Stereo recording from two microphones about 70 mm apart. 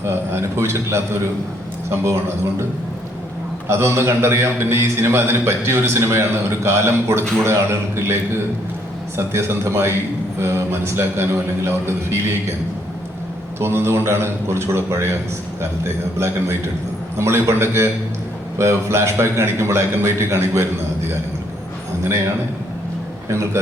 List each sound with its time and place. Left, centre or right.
0.0 s a man's voice: right
3.7 s a man's voice: right
13.6 s a man's voice: right
22.0 s a man's voice: right